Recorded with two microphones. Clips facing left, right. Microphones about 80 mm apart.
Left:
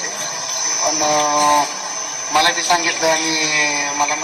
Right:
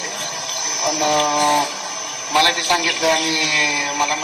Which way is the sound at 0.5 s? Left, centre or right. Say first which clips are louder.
Left 1 dB; centre.